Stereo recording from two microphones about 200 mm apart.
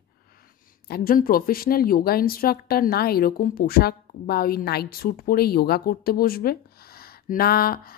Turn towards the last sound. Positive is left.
turn(degrees=45)  # may be behind; listen again after turning